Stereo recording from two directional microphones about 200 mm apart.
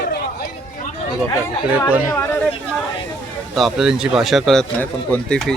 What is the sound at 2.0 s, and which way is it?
Speech, 10° left (ahead or behind).